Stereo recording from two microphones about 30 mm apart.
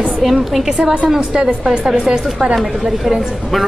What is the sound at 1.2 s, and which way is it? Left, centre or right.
A woman's voice, right.